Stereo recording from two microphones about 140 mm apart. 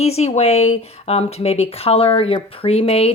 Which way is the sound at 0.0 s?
50° left (ahead or behind).